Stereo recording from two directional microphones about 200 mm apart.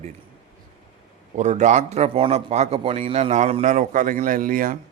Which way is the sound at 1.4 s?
35° right (ahead or behind).